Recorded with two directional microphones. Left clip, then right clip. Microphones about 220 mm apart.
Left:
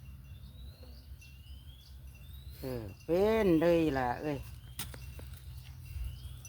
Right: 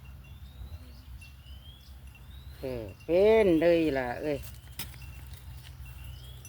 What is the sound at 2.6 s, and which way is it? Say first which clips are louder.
Speech: right 5 dB; 40° left (ahead or behind).